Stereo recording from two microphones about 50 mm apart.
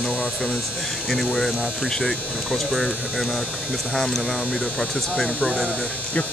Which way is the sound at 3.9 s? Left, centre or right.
Centre.